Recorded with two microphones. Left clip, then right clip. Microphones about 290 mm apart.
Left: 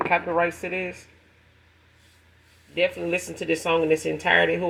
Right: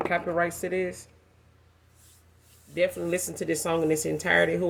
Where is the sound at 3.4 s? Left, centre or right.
Right.